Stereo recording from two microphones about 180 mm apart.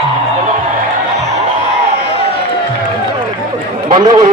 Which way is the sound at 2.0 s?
35° left (ahead or behind).